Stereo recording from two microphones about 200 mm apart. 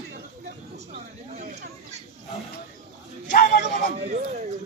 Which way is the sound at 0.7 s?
35° right (ahead or behind).